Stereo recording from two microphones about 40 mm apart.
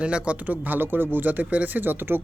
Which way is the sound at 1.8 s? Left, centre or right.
Right.